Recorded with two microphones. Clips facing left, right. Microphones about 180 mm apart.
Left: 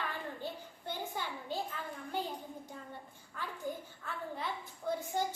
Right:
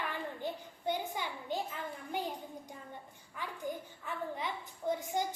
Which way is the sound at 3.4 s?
15° right (ahead or behind).